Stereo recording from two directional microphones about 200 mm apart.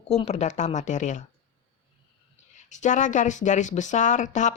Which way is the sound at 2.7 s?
40° left (ahead or behind).